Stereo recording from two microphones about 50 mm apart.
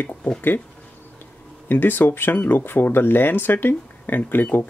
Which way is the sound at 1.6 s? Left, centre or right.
Left.